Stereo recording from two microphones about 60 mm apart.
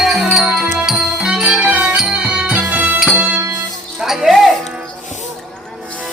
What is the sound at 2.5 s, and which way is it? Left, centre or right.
Music, right.